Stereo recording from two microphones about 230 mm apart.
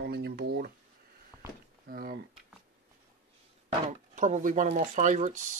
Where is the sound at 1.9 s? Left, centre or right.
Right.